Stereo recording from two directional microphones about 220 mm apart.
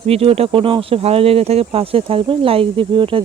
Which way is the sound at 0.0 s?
25° right (ahead or behind).